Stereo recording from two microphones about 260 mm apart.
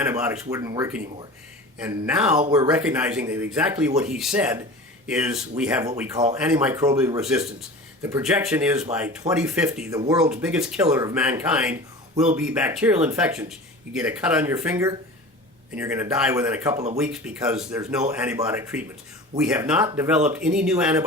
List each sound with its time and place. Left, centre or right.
0.0 s a man's voice: centre
16.7 s speech: right
17.0 s speech: centre